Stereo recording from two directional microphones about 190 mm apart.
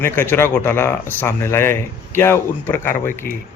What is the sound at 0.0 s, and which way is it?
Speech, 10° left (ahead or behind).